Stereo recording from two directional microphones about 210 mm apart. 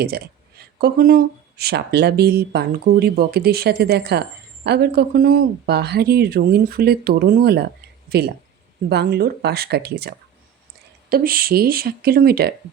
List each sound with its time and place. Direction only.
0.0 s speech: 50° right (ahead or behind)